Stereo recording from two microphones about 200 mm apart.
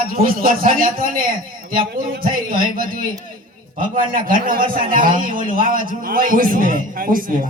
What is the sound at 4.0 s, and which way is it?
A man's voice, 45° right (ahead or behind).